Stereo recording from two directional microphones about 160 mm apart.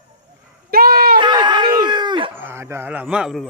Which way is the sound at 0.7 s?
70° right (ahead or behind).